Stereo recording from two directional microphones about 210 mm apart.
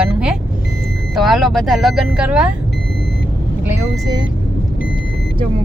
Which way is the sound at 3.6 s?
10° right (ahead or behind).